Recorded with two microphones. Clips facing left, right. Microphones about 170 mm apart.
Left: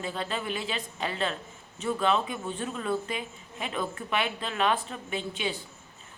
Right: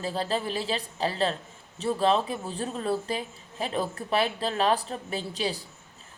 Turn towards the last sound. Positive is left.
turn(degrees=-35)  # may be behind; listen again after turning